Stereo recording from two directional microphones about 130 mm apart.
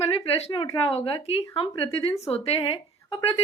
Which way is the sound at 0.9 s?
45° left (ahead or behind).